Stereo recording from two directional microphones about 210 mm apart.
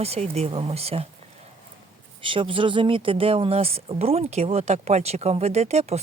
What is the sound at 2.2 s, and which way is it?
Speech, 25° right (ahead or behind).